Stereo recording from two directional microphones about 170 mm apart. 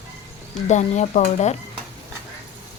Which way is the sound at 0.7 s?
45° left (ahead or behind).